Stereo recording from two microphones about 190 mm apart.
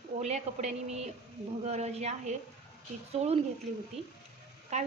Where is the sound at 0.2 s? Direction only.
35° right (ahead or behind).